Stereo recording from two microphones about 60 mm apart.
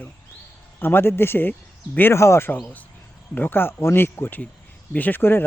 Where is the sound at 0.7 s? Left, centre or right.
Left.